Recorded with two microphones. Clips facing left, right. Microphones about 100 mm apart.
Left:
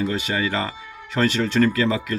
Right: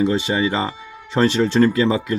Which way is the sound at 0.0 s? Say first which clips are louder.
Right 5 dB; 25° right (ahead or behind).